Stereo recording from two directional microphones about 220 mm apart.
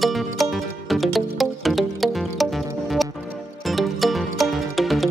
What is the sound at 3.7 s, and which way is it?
Music, centre (ahead or behind).